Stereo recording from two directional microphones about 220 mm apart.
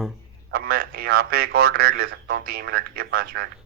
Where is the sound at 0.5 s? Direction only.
45° right (ahead or behind).